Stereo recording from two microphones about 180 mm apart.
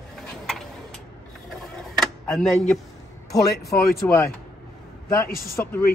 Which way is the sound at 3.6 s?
55° left (ahead or behind).